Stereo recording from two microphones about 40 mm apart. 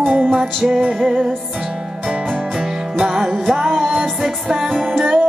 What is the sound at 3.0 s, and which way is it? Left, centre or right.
Music, centre.